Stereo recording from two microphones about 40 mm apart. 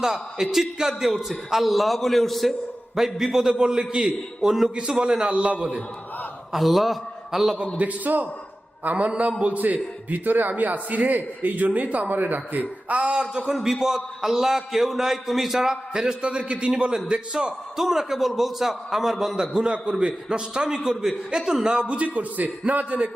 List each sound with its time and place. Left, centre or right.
0.0 s a man's voice: centre
4.7 s a man's voice: centre
5.2 s a man's voice: right
6.5 s a man's voice: centre
7.8 s a man's voice: right
10.5 s a man's voice: right
13.0 s a man's voice: right
13.6 s a man's voice: centre; by 17.5 s right
17.7 s a man's voice: centre
19.7 s a man's voice: right
21.8 s a man's voice: right